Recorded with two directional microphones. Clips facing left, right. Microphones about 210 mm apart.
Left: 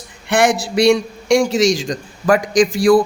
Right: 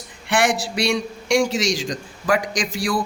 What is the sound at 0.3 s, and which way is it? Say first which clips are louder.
A man's voice: left 5 dB; 45° left (ahead or behind).